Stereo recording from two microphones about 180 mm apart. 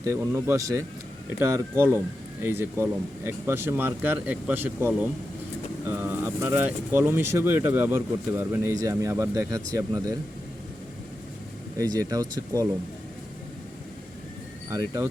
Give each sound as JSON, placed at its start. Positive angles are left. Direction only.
{"t": 0.0, "sound": "speech", "side_deg": -15}
{"t": 11.8, "sound": "speech", "side_deg": -20}
{"t": 14.7, "sound": "speech", "side_deg": -15}